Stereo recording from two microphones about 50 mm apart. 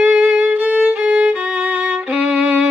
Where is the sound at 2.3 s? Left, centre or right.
Right.